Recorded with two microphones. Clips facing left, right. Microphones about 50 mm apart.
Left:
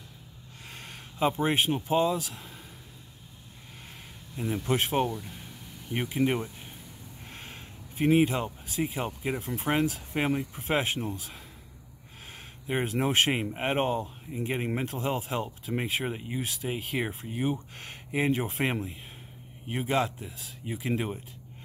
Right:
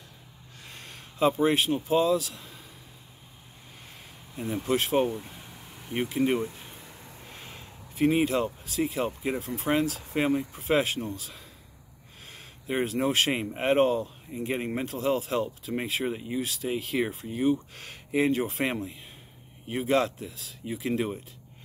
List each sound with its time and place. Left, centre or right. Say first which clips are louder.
0.7 s speech: left 1 dB; centre
5.0 s speech: right 2 dB; right
5.9 s speech: right 2 dB; centre
12.3 s speech: even; centre
18.7 s speech: even; centre